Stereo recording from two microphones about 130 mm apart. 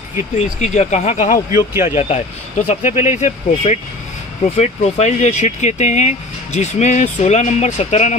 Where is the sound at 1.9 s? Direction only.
55° left (ahead or behind).